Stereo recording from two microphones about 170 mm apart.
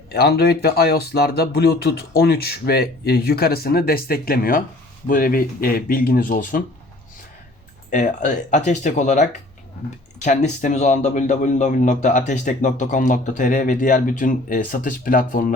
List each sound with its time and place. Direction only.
0.1 s speech: 70° left (ahead or behind); by 6.6 s 55° left (ahead or behind)
7.9 s speech: 50° left (ahead or behind)